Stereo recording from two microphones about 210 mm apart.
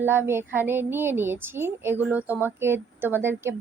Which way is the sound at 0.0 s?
10° right (ahead or behind).